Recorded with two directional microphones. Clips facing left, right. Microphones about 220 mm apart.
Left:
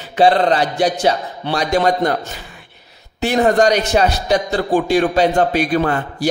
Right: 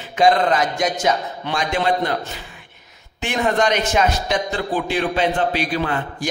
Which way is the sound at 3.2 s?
35° left (ahead or behind).